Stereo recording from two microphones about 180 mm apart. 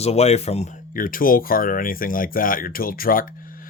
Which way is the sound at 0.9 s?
50° left (ahead or behind).